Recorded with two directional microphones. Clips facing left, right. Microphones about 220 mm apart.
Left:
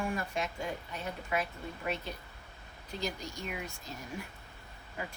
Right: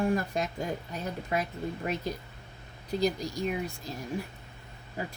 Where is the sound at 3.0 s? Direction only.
35° right (ahead or behind).